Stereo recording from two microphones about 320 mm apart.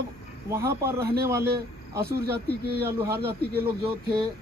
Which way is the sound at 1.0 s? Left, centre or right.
Right.